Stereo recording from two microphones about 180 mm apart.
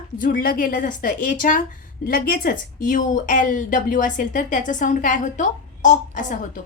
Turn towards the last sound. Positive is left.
turn(degrees=45)  # may be behind; listen again after turning